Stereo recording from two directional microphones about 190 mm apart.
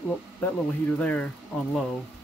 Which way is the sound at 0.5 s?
5° left (ahead or behind).